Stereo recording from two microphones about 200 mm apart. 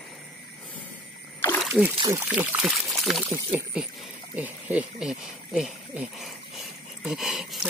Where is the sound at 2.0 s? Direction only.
10° right (ahead or behind).